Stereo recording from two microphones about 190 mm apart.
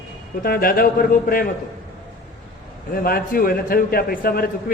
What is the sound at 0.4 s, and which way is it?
Speech, 50° left (ahead or behind).